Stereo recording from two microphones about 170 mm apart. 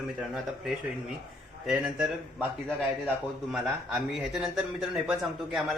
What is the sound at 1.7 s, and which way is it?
Speech, 5° right (ahead or behind).